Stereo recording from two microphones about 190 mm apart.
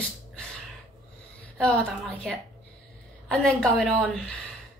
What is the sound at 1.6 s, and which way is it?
A woman's voice, 5° left (ahead or behind).